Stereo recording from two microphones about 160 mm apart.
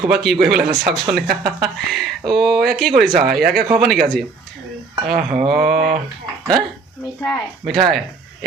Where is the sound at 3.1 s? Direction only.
65° right (ahead or behind).